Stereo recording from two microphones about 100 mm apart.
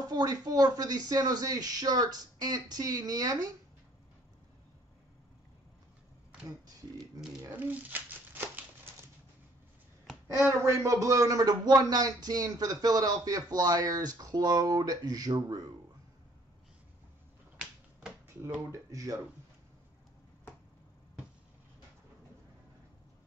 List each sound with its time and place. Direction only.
0.0 s speech: 40° right (ahead or behind)
7.5 s a sound: 15° right (ahead or behind)
10.4 s speech: 30° right (ahead or behind)
18.7 s speech: 35° right (ahead or behind)